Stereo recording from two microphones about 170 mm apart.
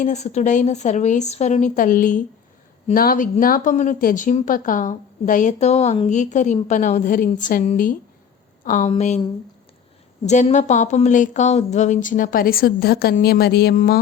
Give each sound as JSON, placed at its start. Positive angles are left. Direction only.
{"t": 0.0, "sound": "a woman's voice", "side_deg": 40}
{"t": 10.2, "sound": "speech", "side_deg": 45}